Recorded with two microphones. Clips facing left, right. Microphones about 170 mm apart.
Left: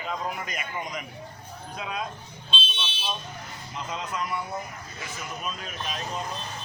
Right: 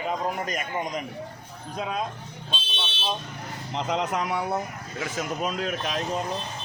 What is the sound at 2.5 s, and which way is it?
Car alarm, 20° right (ahead or behind).